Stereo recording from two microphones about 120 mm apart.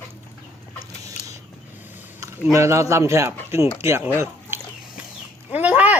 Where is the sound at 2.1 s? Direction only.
25° right (ahead or behind).